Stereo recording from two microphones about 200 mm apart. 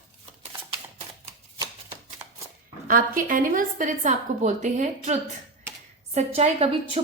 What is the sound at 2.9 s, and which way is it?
A woman's voice, 45° right (ahead or behind).